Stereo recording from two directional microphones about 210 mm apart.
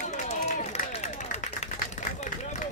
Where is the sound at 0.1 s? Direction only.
35° left (ahead or behind).